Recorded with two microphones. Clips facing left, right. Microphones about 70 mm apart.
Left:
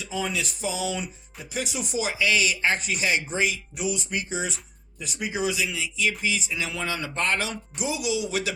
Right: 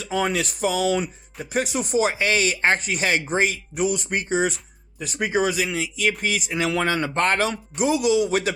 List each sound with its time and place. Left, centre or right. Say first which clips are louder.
0.0 s speech: right 6 dB; right